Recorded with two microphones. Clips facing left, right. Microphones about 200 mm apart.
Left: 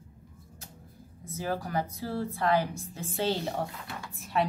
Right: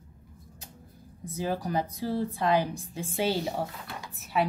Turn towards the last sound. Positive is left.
turn(degrees=-5)  # may be behind; listen again after turning